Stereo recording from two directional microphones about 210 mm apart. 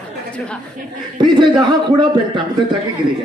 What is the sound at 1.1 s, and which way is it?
A man's voice, 20° right (ahead or behind).